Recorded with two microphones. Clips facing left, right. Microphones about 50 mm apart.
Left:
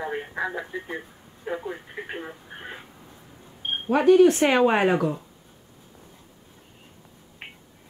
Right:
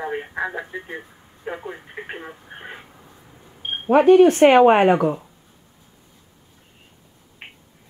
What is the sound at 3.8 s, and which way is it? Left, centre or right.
Speech, right.